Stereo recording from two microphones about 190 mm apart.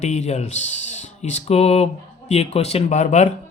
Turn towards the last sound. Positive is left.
turn(degrees=40)  # may be behind; listen again after turning